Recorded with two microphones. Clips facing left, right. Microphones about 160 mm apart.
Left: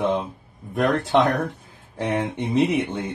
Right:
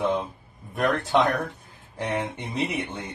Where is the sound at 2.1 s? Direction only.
20° left (ahead or behind).